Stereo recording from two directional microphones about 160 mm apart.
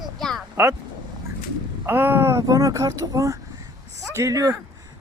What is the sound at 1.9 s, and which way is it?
Speech, 10° right (ahead or behind).